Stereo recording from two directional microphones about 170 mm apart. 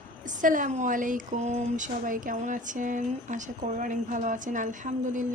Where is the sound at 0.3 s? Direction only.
50° right (ahead or behind).